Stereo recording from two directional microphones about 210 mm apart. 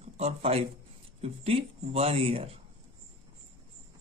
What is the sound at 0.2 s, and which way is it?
Speech, 30° right (ahead or behind).